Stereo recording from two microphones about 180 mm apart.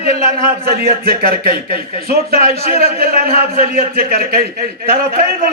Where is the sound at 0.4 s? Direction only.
55° right (ahead or behind).